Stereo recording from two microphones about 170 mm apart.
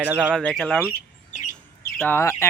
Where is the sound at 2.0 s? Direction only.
15° left (ahead or behind).